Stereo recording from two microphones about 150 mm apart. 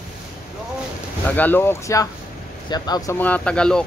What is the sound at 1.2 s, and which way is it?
Speech, 10° left (ahead or behind).